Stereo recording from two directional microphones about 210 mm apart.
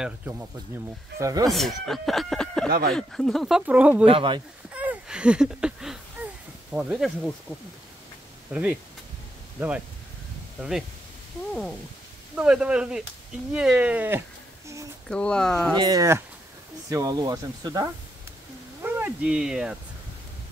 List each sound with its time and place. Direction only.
0.0 s speech: 10° right (ahead or behind)
1.5 s speech: centre (ahead or behind)
4.0 s speech: 25° right (ahead or behind)
4.6 s a sound: 5° right (ahead or behind)
8.5 s speech: 5° right (ahead or behind)
12.4 s speech: 5° right (ahead or behind)
15.0 s speech: 5° left (ahead or behind)
15.7 s speech: 20° right (ahead or behind); by 19.8 s 5° right (ahead or behind)